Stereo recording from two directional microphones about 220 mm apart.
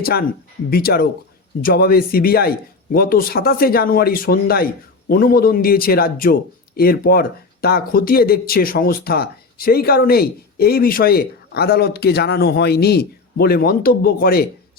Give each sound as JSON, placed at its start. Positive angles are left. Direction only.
{"t": 0.0, "sound": "speech", "side_deg": 45}